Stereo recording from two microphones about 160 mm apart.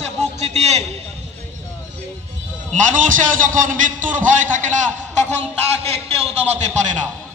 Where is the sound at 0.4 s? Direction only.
45° right (ahead or behind).